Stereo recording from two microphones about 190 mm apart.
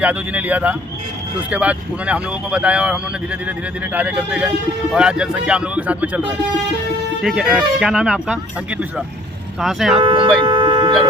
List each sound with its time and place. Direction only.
0.0 s speech: 5° right (ahead or behind)
7.2 s speech: centre (ahead or behind)
9.6 s speech: centre (ahead or behind)
10.0 s speech: 25° right (ahead or behind)